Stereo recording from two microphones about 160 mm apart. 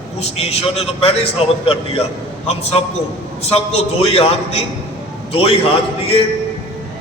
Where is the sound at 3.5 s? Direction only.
40° left (ahead or behind).